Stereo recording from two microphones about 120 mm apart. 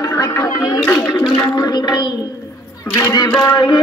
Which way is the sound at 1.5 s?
35° left (ahead or behind).